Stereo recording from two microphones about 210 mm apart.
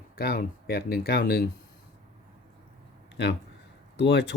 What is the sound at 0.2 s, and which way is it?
Speech, 45° left (ahead or behind).